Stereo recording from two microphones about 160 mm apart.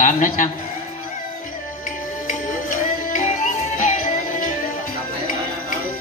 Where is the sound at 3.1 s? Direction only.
50° left (ahead or behind).